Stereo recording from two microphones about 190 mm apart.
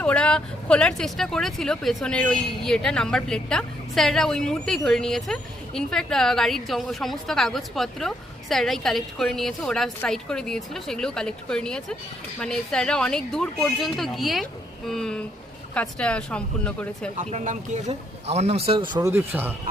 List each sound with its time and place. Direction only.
0.0 s speech: 5° left (ahead or behind)
17.2 s speech: 40° right (ahead or behind)
18.9 s speech: 15° right (ahead or behind)